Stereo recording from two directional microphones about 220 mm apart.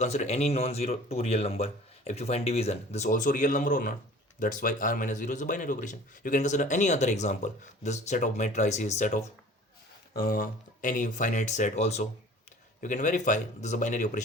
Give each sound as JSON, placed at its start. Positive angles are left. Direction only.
{"t": 0.0, "sound": "speech", "side_deg": 30}